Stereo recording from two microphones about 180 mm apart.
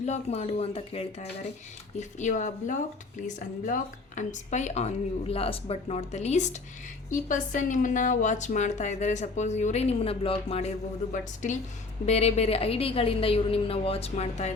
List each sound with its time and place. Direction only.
0.0 s a woman's voice: 40° left (ahead or behind)
12.0 s a woman's voice: 35° left (ahead or behind)